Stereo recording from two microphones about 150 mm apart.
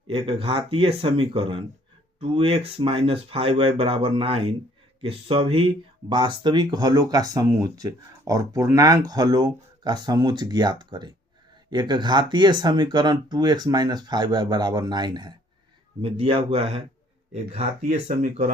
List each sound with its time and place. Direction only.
0.1 s speech: 40° right (ahead or behind)
18.2 s speech: 60° right (ahead or behind)